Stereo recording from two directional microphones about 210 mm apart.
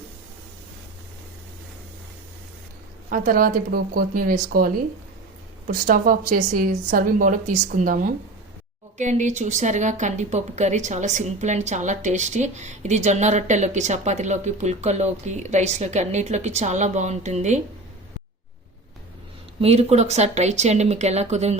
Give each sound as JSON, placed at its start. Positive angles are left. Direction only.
{"t": 3.1, "sound": "a woman's voice", "side_deg": -40}
{"t": 19.6, "sound": "a woman's voice", "side_deg": -30}